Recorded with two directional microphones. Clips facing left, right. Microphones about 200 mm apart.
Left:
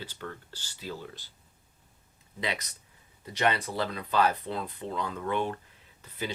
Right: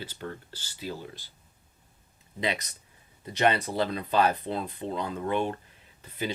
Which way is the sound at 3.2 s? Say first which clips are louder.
Right 3 dB; 25° right (ahead or behind).